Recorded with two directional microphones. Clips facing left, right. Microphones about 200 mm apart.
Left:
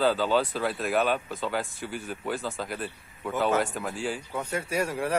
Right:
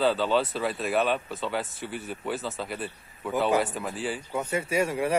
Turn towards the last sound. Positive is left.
turn(degrees=-5)  # may be behind; listen again after turning